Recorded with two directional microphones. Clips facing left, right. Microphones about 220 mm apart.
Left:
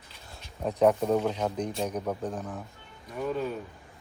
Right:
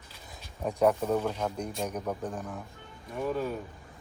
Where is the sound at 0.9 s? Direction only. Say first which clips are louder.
Left 3 dB; 15° left (ahead or behind).